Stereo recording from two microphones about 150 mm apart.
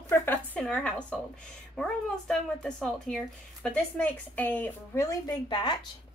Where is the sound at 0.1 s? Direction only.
15° left (ahead or behind).